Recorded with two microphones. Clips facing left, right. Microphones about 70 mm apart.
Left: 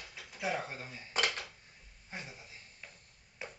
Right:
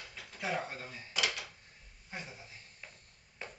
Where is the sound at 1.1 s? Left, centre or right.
Left.